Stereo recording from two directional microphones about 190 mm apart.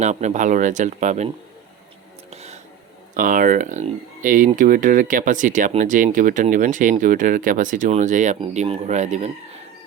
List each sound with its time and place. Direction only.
0.0 s speech: 40° right (ahead or behind)
2.3 s whispering: 35° right (ahead or behind)
3.2 s speech: 45° right (ahead or behind)